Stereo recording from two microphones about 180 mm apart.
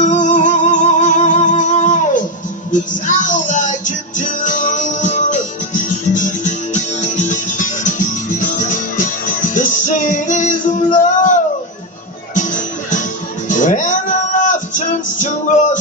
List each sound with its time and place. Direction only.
0.0 s music: 45° left (ahead or behind)